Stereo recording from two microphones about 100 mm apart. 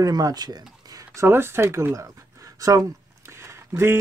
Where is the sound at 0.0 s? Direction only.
40° right (ahead or behind).